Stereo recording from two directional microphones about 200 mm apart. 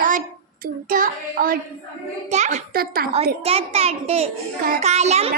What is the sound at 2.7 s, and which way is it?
Child singing, 50° right (ahead or behind).